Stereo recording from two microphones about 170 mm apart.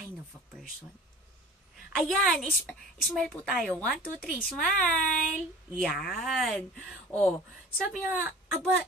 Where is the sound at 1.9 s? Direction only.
Centre (ahead or behind).